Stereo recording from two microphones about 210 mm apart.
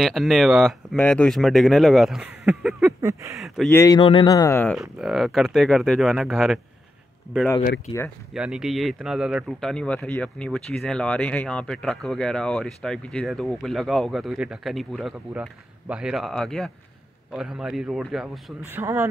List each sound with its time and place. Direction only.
0.0 s speech: centre (ahead or behind)
3.0 s speech: 15° right (ahead or behind)
3.3 s speech: centre (ahead or behind)
3.7 s speech: 20° left (ahead or behind)
4.7 s speech: centre (ahead or behind)
8.3 s speech: 5° right (ahead or behind)